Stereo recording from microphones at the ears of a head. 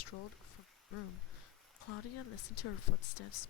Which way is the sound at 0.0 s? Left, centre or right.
Left.